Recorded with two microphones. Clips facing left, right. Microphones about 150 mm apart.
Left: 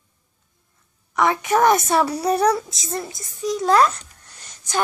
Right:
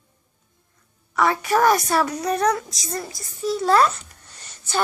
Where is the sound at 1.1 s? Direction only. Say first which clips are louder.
Left 1 dB; 15° left (ahead or behind).